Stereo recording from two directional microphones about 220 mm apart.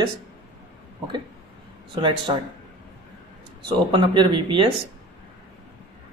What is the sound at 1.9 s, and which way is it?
Speech, 20° right (ahead or behind).